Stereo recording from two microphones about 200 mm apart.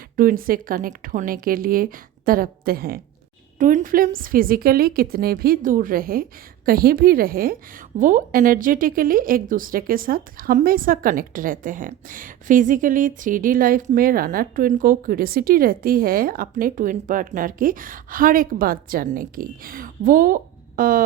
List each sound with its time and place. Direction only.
0.2 s a woman's voice: 45° right (ahead or behind)